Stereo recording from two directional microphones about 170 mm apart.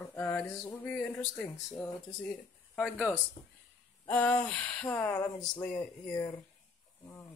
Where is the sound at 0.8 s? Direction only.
10° left (ahead or behind).